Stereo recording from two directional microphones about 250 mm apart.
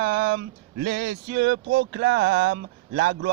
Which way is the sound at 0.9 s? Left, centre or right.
Right.